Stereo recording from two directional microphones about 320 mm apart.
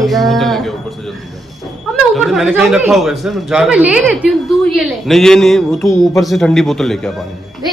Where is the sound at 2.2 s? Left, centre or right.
Centre.